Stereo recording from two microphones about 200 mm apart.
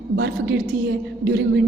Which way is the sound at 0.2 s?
60° right (ahead or behind).